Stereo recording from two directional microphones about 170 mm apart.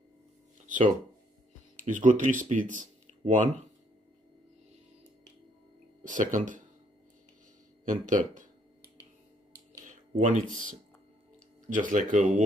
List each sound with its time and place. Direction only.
1.9 s speech: 50° right (ahead or behind)
6.0 s speech: 50° right (ahead or behind)
7.9 s speech: 50° right (ahead or behind)
9.7 s a sound: 45° right (ahead or behind)
10.5 s speech: 50° right (ahead or behind)